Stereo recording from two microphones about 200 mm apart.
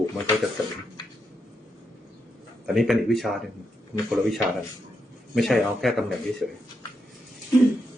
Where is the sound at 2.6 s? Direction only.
Centre (ahead or behind).